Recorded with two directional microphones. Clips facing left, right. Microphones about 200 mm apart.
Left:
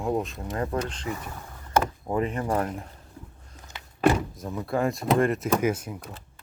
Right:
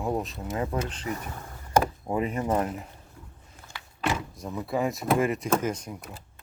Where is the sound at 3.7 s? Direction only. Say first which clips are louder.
Even; 20° left (ahead or behind).